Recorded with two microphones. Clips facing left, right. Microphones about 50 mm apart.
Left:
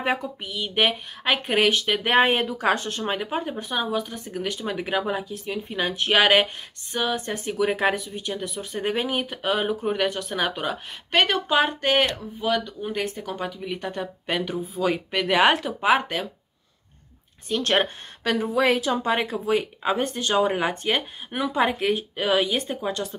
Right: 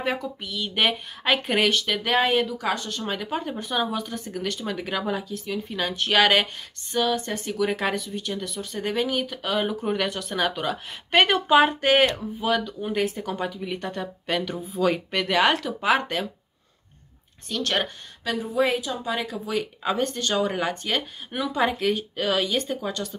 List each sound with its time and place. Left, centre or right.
0.0 s speech: left
2.0 s speech: left
3.0 s speech: left
3.5 s speech: centre
11.1 s speech: centre
17.5 s speech: left
18.2 s speech: left
19.8 s speech: centre